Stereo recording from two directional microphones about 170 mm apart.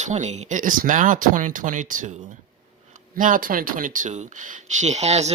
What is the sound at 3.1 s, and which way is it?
Speech, 50° right (ahead or behind).